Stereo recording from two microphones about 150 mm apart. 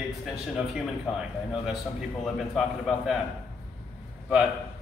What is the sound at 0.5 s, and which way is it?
A man's voice, 5° right (ahead or behind).